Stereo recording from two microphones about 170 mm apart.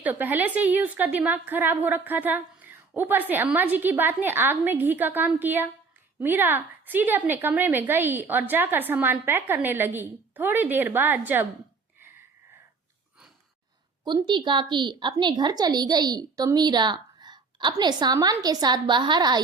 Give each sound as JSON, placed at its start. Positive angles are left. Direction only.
{"t": 0.0, "sound": "a woman's voice", "side_deg": -10}
{"t": 14.0, "sound": "a woman's voice", "side_deg": -25}